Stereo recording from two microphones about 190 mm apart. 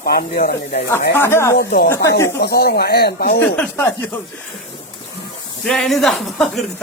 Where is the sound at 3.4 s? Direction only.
10° left (ahead or behind).